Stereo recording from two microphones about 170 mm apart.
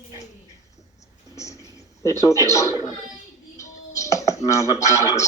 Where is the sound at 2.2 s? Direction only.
20° left (ahead or behind).